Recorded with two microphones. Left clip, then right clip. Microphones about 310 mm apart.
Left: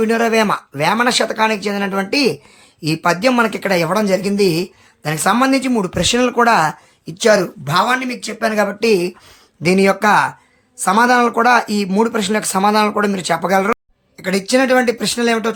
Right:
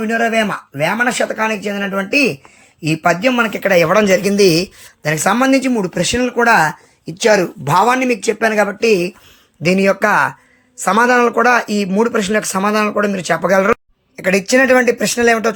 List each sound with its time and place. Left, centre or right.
0.0 s speech: centre